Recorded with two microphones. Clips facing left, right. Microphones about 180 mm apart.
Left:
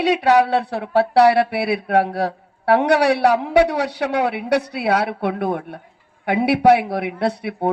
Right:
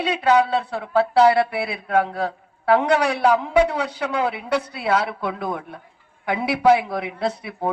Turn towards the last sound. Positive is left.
turn(degrees=65)  # may be behind; listen again after turning